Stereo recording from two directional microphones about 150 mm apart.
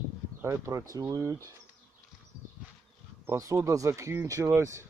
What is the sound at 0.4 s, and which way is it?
Speech, 20° right (ahead or behind).